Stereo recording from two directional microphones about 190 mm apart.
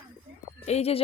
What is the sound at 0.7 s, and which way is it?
Speech, 35° left (ahead or behind).